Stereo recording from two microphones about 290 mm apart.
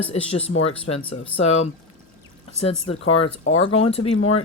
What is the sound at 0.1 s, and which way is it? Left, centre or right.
Speech, left.